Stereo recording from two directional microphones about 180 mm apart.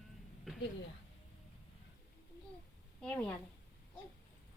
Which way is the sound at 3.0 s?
10° left (ahead or behind).